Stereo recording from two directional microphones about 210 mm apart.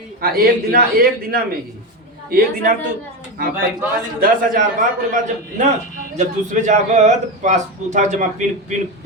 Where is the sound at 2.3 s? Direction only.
45° right (ahead or behind).